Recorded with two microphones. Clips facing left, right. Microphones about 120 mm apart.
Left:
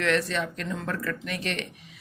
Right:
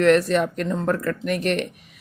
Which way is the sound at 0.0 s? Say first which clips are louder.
Right 9 dB; 45° right (ahead or behind).